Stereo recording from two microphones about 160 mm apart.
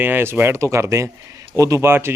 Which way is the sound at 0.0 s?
15° right (ahead or behind).